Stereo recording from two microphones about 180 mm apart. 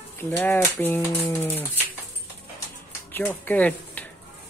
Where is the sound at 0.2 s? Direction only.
15° left (ahead or behind).